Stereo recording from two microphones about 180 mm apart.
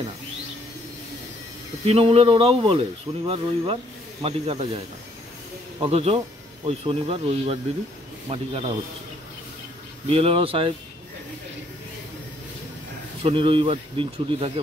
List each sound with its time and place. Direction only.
1.9 s speech: 30° right (ahead or behind)
5.8 s speech: 35° right (ahead or behind)
10.0 s speech: 30° right (ahead or behind)
13.2 s speech: 30° right (ahead or behind)